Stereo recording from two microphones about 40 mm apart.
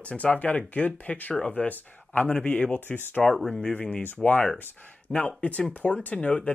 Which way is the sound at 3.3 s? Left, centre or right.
Centre.